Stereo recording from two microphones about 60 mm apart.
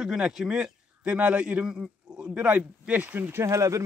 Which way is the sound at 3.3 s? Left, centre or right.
Right.